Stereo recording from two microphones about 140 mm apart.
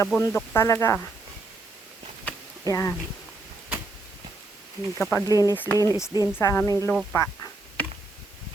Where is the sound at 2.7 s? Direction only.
25° left (ahead or behind).